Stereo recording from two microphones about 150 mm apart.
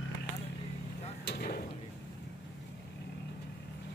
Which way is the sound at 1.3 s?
90° left.